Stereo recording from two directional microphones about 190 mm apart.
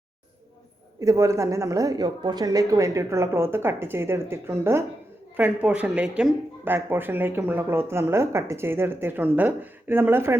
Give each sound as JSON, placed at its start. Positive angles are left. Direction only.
{"t": 0.9, "sound": "speech", "side_deg": -15}